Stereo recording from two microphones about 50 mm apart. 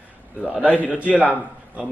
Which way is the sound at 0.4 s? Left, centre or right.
Right.